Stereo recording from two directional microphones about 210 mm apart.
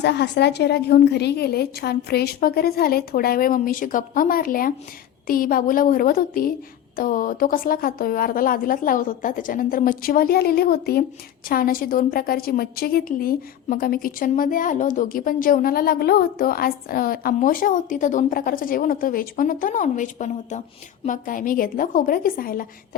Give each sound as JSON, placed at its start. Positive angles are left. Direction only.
{"t": 0.0, "sound": "a woman's voice", "side_deg": 55}